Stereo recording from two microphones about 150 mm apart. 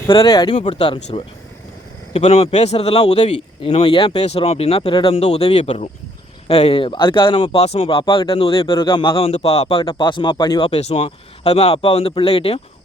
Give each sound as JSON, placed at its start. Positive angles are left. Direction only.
{"t": 0.3, "sound": "speech", "side_deg": 25}
{"t": 0.5, "sound": "speech", "side_deg": 45}
{"t": 10.7, "sound": "speech", "side_deg": 45}